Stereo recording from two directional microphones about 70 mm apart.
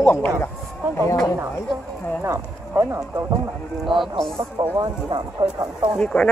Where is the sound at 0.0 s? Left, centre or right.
Left.